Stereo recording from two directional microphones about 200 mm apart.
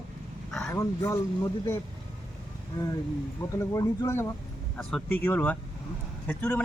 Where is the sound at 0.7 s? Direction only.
15° left (ahead or behind).